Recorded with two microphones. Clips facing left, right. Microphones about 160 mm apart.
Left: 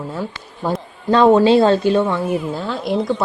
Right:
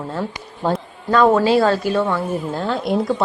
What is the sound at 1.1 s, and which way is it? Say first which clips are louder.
Speech: left 3 dB; 25° left (ahead or behind).